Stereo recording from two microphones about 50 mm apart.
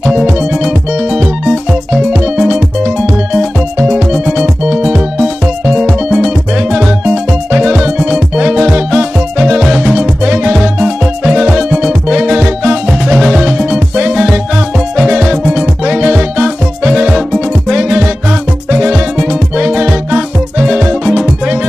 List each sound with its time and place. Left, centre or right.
0.0 s music: centre
3.9 s music: centre
9.6 s music: centre
9.9 s music: centre
13.1 s music: centre